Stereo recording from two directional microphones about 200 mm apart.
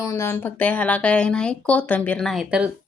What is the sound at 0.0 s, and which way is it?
Speech, 15° left (ahead or behind).